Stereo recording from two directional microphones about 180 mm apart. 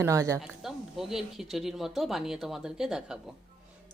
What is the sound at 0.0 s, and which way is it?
Speech, 15° right (ahead or behind).